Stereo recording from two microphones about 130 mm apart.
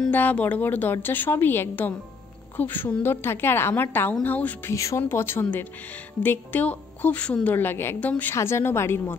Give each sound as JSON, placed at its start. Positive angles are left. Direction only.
{"t": 0.0, "sound": "a woman's voice", "side_deg": 15}